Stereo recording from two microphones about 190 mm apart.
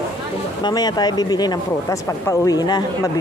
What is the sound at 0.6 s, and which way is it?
Speech, 20° left (ahead or behind).